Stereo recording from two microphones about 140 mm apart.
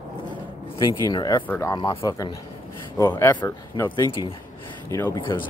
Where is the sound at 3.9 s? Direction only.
25° left (ahead or behind).